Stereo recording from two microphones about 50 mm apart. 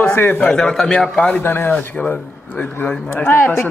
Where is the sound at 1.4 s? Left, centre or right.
Left.